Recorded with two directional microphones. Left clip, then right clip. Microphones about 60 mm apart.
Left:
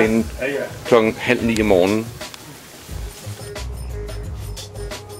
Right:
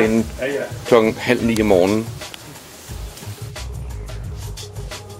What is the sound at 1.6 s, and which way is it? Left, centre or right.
Speech, centre.